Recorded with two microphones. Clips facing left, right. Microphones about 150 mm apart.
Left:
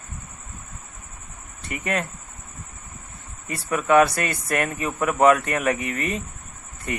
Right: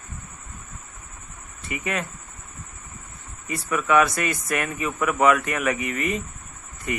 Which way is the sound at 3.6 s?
35° left (ahead or behind).